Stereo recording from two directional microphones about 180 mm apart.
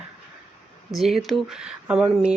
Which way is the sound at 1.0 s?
Centre (ahead or behind).